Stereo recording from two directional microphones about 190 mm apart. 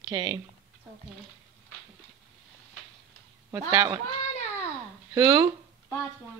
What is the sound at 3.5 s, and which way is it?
Speech, 15° right (ahead or behind).